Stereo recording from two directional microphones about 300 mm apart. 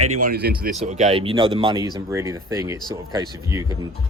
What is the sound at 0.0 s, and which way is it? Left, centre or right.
Speech, right.